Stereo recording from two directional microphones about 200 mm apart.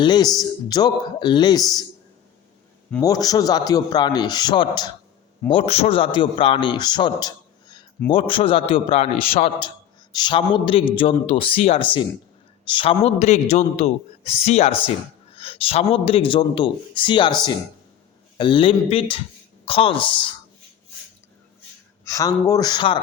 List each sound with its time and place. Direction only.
0.0 s a man's voice: 20° left (ahead or behind)
3.0 s a man's voice: 20° left (ahead or behind)
18.3 s a man's voice: 25° left (ahead or behind)
22.0 s a man's voice: 15° left (ahead or behind)